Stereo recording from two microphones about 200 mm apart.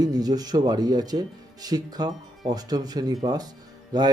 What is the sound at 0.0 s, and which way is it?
Speech, 20° right (ahead or behind).